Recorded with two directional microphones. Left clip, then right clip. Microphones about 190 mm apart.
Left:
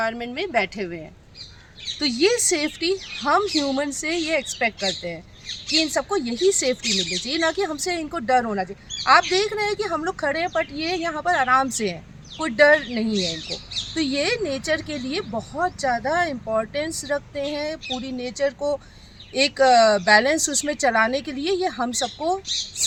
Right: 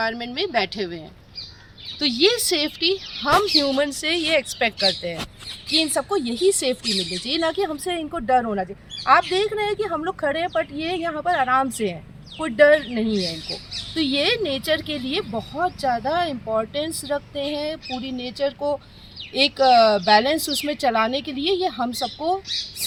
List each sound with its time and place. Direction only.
0.0 s a woman's voice: 45° left (ahead or behind)
2.2 s a woman's voice: 20° left (ahead or behind)
3.6 s speech: centre (ahead or behind)
13.1 s speech: 5° right (ahead or behind)